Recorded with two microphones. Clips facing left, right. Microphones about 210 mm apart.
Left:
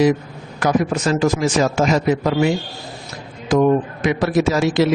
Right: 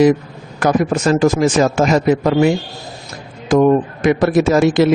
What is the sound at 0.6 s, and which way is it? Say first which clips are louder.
A man's voice: right 3 dB; 45° right (ahead or behind).